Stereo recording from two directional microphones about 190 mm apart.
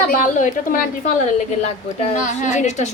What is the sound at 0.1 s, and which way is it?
Speech, 40° left (ahead or behind).